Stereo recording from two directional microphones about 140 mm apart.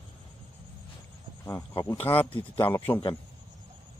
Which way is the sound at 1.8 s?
15° left (ahead or behind).